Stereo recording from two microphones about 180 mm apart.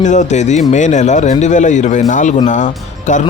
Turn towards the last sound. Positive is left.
turn(degrees=45)  # may be behind; listen again after turning